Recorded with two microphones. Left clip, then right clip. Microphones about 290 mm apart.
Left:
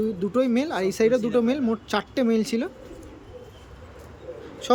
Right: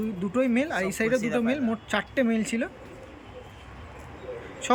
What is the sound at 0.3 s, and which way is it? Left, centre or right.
Speech, centre.